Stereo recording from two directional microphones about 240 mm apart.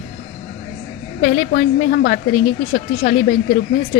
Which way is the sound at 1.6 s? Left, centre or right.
Left.